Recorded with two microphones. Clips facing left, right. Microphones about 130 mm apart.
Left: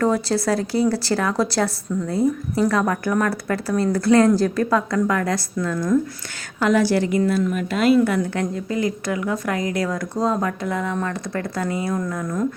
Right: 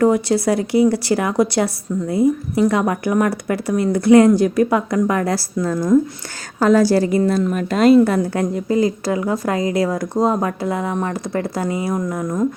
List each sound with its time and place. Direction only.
0.0 s a woman's voice: 20° right (ahead or behind); by 8.4 s 35° right (ahead or behind)
8.4 s speech: 25° right (ahead or behind)